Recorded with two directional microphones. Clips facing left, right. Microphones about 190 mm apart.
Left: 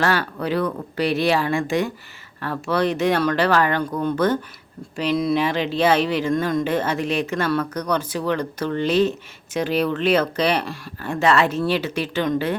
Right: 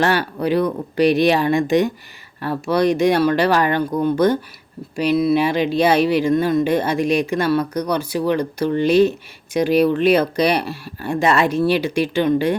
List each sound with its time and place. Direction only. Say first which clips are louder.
0.0 s speech: right 3 dB; 15° right (ahead or behind)